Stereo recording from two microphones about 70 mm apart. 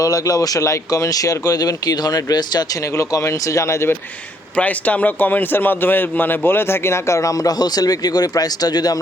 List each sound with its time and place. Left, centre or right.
0.0 s speech: left
2.9 s speech: left
4.5 s a man's voice: left